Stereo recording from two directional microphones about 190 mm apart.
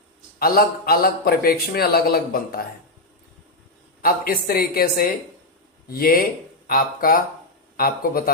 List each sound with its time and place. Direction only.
0.3 s a man's voice: 50° left (ahead or behind)
4.0 s a man's voice: 50° left (ahead or behind)